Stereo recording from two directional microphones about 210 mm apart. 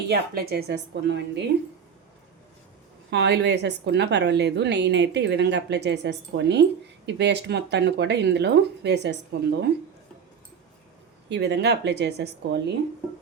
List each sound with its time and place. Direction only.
0.1 s a woman's voice: 50° right (ahead or behind)
3.1 s a woman's voice: 55° right (ahead or behind)
11.3 s a woman's voice: 55° right (ahead or behind)